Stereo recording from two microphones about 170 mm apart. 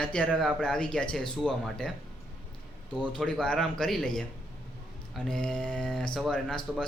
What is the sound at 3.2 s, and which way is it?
Speech, 5° left (ahead or behind).